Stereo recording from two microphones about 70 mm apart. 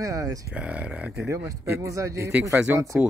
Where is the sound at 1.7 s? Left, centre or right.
Right.